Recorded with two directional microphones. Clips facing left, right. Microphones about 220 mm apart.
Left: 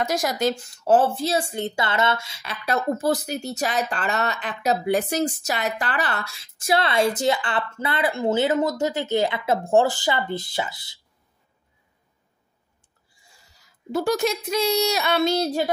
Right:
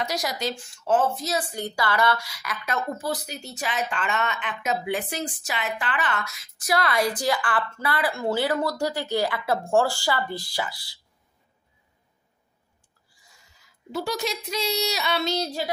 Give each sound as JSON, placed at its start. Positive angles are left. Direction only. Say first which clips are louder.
{"t": 0.0, "sound": "speech", "louder": "left 5 dB", "side_deg": 50}
{"t": 13.1, "sound": "a sound", "louder": "left 2 dB", "side_deg": 30}
{"t": 13.9, "sound": "a woman's voice", "louder": "left 6 dB", "side_deg": 50}